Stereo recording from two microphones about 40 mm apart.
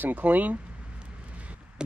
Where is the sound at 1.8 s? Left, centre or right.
Right.